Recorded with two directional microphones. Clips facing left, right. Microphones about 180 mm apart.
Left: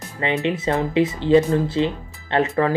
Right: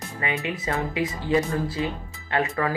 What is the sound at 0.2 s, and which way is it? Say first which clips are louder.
Speech: left 7 dB; 25° left (ahead or behind).